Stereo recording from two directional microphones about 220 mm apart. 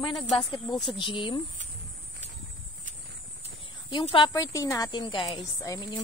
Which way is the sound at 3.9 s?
20° left (ahead or behind).